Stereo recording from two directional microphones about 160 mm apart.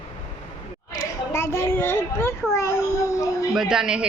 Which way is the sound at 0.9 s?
20° left (ahead or behind).